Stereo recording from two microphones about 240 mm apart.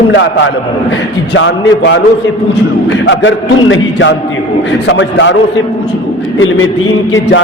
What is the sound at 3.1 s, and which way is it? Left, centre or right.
A man's voice, left.